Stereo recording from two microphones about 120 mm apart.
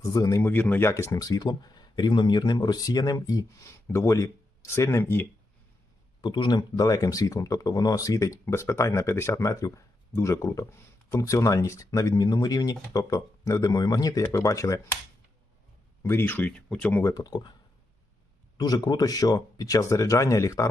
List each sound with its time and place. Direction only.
0.0 s speech: 30° left (ahead or behind)
0.4 s speech: 15° left (ahead or behind)
6.2 s speech: 40° left (ahead or behind)
16.0 s speech: 15° left (ahead or behind)
17.0 s speech: 30° left (ahead or behind)
18.5 s speech: 35° left (ahead or behind)